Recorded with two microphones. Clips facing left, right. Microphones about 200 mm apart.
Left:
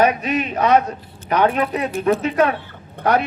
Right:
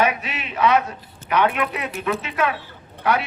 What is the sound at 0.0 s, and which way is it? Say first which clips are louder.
A man's voice: left 5 dB; 40° left (ahead or behind).